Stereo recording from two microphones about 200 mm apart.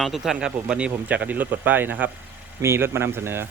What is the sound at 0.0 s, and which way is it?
Speech, centre (ahead or behind).